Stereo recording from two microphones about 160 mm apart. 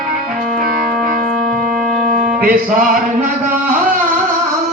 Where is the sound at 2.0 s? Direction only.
55° right (ahead or behind).